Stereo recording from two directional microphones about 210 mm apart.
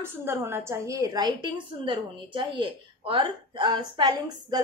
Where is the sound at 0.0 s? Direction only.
10° right (ahead or behind).